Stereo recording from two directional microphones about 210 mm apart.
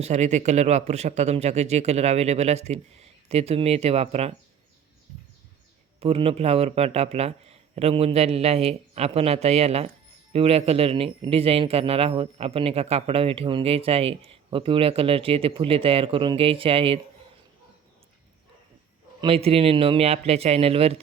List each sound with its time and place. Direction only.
0.0 s speech: 35° right (ahead or behind)
6.0 s a man's voice: 30° right (ahead or behind)
19.2 s a man's voice: 30° right (ahead or behind)